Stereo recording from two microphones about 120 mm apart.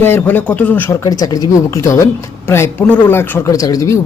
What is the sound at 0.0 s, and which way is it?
Speech, 15° left (ahead or behind).